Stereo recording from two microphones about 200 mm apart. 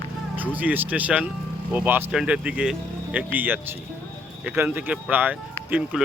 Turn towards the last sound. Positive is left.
turn(degrees=-5)  # may be behind; listen again after turning